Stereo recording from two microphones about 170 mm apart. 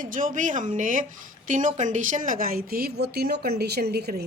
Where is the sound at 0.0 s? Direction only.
50° right (ahead or behind).